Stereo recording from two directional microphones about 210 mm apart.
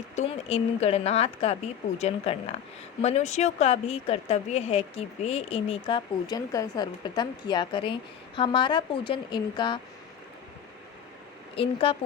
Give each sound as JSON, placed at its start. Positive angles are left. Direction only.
{"t": 0.2, "sound": "speech", "side_deg": 30}
{"t": 11.5, "sound": "speech", "side_deg": 25}